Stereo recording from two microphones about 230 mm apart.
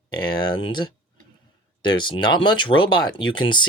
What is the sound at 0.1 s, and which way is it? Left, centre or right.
Speech, centre.